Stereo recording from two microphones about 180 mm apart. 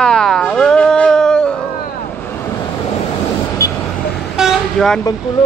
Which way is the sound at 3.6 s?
15° left (ahead or behind).